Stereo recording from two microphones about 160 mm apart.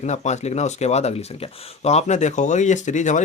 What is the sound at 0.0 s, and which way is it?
Speech, 45° left (ahead or behind).